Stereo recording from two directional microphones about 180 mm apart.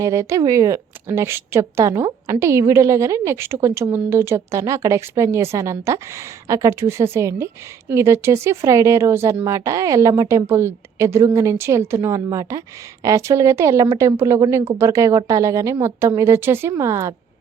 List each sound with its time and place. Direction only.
0.0 s speech: 15° right (ahead or behind)